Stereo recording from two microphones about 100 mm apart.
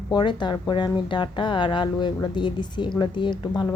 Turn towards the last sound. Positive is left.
turn(degrees=50)  # may be behind; listen again after turning